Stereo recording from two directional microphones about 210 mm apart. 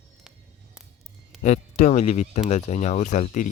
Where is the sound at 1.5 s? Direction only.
35° left (ahead or behind).